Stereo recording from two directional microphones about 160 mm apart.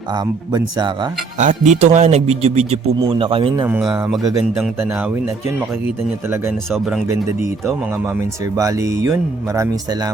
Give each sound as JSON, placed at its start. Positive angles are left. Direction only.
{"t": 0.5, "sound": "speech", "side_deg": -25}
{"t": 1.4, "sound": "speech", "side_deg": -50}
{"t": 8.5, "sound": "speech", "side_deg": -20}